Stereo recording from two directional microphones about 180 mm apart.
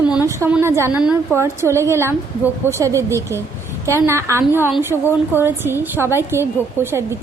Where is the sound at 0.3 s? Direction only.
15° right (ahead or behind).